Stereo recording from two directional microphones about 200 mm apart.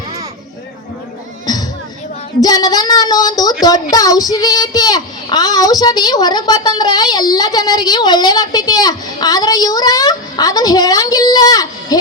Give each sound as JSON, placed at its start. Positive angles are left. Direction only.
{"t": 2.4, "sound": "a child's voice", "side_deg": 20}